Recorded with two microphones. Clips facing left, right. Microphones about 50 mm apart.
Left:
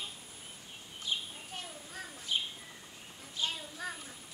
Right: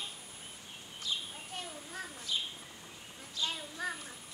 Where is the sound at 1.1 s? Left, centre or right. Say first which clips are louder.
Left 1 dB; left.